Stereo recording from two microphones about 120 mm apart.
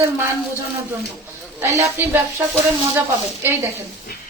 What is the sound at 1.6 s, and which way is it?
Speech, 25° right (ahead or behind).